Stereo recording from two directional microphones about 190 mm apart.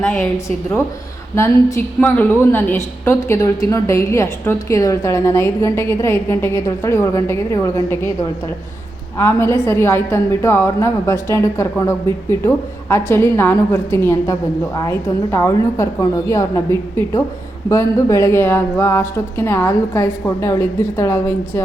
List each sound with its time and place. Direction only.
0.0 s a woman's voice: 10° left (ahead or behind)
9.1 s a woman's voice: 15° left (ahead or behind)